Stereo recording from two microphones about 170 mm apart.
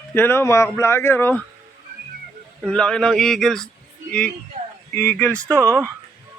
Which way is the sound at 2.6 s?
5° left (ahead or behind).